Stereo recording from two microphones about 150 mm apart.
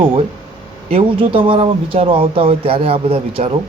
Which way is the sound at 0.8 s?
40° right (ahead or behind).